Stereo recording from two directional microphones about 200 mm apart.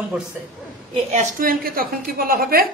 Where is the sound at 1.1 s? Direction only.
45° right (ahead or behind).